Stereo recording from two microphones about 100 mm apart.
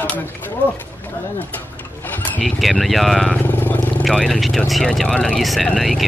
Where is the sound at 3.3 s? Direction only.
15° left (ahead or behind).